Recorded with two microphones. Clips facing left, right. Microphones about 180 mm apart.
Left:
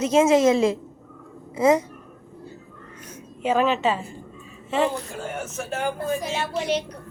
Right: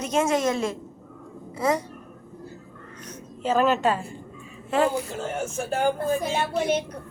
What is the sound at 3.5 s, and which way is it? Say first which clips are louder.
A woman's voice: even; centre (ahead or behind).